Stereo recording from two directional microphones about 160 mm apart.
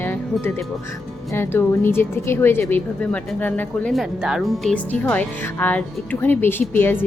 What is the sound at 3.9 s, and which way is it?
Speech, centre (ahead or behind).